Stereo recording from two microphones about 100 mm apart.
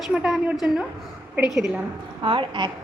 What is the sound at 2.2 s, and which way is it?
Speech, 55° right (ahead or behind).